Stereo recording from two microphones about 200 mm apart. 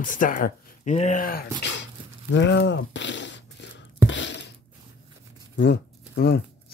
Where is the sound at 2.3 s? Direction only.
60° left (ahead or behind).